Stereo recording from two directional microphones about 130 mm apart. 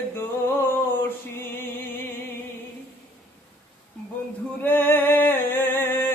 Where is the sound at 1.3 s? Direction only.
15° left (ahead or behind).